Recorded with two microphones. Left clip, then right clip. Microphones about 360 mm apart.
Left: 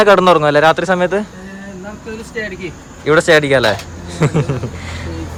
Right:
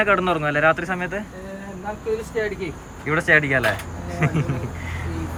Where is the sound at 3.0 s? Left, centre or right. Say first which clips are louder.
Left 8 dB; centre.